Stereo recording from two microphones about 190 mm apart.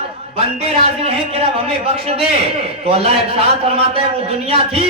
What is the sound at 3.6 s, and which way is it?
Speech, 30° right (ahead or behind).